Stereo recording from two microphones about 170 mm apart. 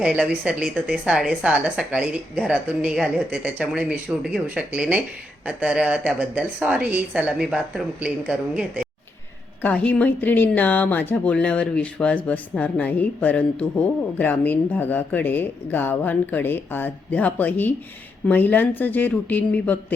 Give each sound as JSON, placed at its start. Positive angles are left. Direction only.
{"t": 0.0, "sound": "speech", "side_deg": -5}
{"t": 9.6, "sound": "speech", "side_deg": 10}